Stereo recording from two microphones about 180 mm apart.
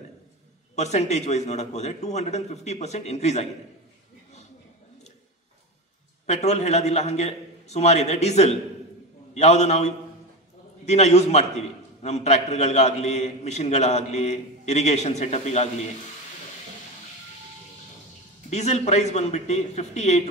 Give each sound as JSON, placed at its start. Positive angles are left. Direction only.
{"t": 0.7, "sound": "a man's voice", "side_deg": 40}
{"t": 6.2, "sound": "a man's voice", "side_deg": 40}
{"t": 18.5, "sound": "a man's voice", "side_deg": 40}